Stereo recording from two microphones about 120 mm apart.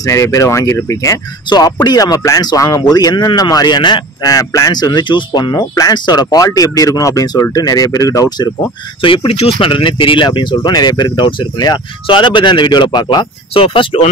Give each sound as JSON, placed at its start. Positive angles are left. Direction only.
{"t": 0.0, "sound": "speech", "side_deg": 25}
{"t": 9.0, "sound": "speech", "side_deg": 45}
{"t": 13.5, "sound": "speech", "side_deg": 50}